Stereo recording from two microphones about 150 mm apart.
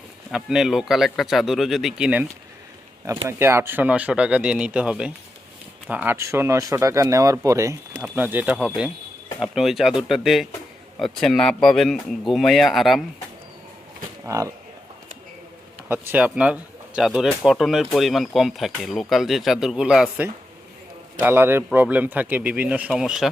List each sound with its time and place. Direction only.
0.3 s speech: 5° right (ahead or behind)
3.2 s a man's voice: 15° right (ahead or behind); by 13.1 s centre (ahead or behind)
14.3 s speech: 20° right (ahead or behind)
15.9 s a man's voice: 15° right (ahead or behind)